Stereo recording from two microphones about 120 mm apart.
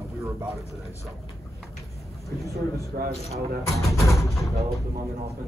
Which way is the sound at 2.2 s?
30° left (ahead or behind).